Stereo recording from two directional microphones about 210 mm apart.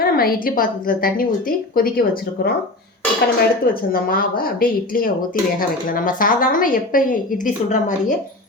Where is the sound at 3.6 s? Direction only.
45° left (ahead or behind).